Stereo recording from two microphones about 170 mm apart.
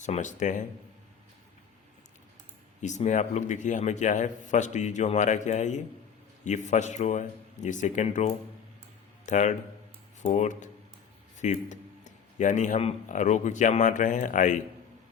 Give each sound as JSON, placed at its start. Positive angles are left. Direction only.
{"t": 0.0, "sound": "speech", "side_deg": 45}
{"t": 2.8, "sound": "speech", "side_deg": 45}